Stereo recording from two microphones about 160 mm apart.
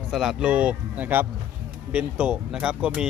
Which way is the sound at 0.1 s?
5° right (ahead or behind).